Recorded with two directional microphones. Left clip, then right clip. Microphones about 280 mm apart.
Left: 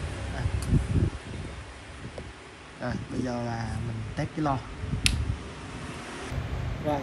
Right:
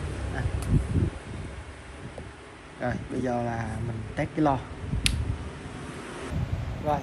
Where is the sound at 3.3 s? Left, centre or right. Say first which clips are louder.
Right 5 dB; centre.